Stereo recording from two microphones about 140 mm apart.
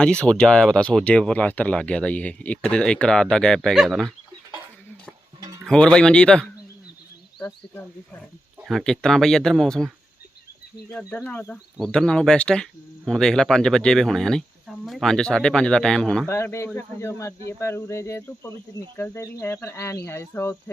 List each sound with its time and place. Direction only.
0.0 s speech: 5° left (ahead or behind)
5.6 s speech: 5° left (ahead or behind)
8.6 s speech: centre (ahead or behind)
10.9 s speech: 10° left (ahead or behind)
16.2 s speech: 20° left (ahead or behind)